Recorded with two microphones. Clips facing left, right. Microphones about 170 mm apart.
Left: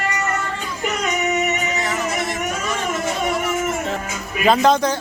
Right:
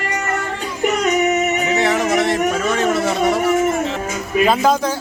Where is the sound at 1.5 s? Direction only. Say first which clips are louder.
Right 6 dB; 75° right (ahead or behind).